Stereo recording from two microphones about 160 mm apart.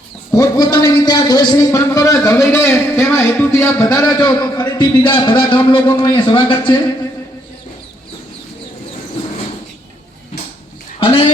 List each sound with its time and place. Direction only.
0.3 s a man's voice: 25° left (ahead or behind)
11.0 s speech: 35° left (ahead or behind)